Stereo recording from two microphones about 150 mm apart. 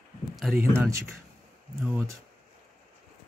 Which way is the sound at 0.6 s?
15° right (ahead or behind).